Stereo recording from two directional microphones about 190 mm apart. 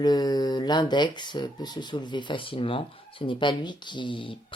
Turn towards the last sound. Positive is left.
turn(degrees=25)  # may be behind; listen again after turning